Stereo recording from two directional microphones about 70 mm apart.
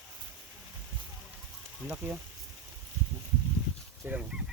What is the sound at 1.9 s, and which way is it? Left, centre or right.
Speech, right.